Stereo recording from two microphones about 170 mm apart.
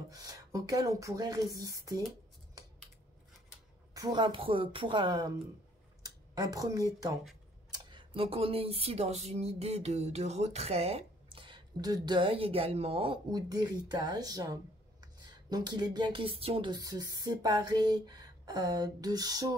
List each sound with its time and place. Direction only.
0.1 s speech: 20° right (ahead or behind)
3.9 s speech: 25° right (ahead or behind)